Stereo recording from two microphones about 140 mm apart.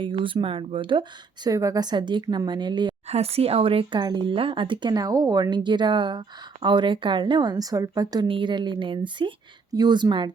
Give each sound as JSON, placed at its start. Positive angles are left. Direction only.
{"t": 0.0, "sound": "speech", "side_deg": -35}
{"t": 1.5, "sound": "speech", "side_deg": -25}
{"t": 3.1, "sound": "speech", "side_deg": -45}